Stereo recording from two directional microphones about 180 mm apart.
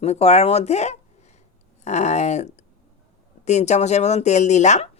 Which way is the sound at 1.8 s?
40° left (ahead or behind).